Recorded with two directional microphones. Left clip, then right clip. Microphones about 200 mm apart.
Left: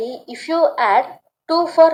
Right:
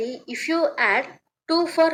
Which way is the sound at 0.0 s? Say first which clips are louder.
Left 1 dB; 30° right (ahead or behind).